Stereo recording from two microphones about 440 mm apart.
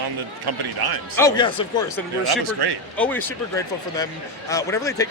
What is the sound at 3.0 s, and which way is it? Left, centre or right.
A man's voice, centre.